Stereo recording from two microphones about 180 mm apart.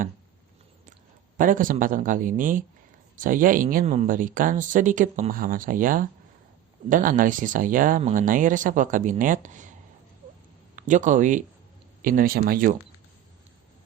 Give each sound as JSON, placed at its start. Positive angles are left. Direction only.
{"t": 1.4, "sound": "speech", "side_deg": -50}
{"t": 10.8, "sound": "speech", "side_deg": -45}